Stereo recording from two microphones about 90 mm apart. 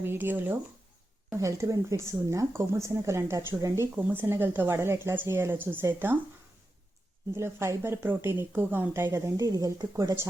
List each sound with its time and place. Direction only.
0.0 s a woman's voice: 25° right (ahead or behind)
1.4 s speech: 40° right (ahead or behind)
3.9 s a woman's voice: 20° right (ahead or behind)
7.3 s a woman's voice: 30° right (ahead or behind)